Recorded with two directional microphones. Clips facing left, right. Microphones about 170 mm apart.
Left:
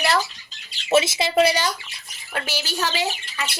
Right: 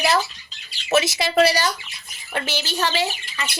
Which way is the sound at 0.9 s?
25° left (ahead or behind).